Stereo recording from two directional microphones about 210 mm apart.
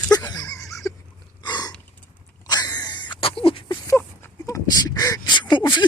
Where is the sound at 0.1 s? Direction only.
20° left (ahead or behind).